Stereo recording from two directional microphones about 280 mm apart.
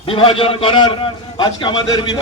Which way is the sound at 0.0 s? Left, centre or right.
Centre.